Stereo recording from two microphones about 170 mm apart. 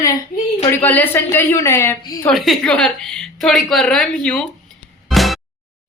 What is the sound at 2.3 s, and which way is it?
A woman's voice, centre (ahead or behind).